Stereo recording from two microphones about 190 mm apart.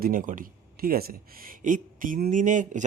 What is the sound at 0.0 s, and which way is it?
Speech, 45° right (ahead or behind).